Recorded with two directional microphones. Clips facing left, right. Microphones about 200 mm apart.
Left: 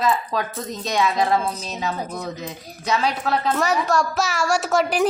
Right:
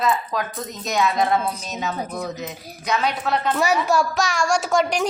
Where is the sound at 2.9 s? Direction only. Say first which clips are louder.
Left 1 dB; 30° left (ahead or behind).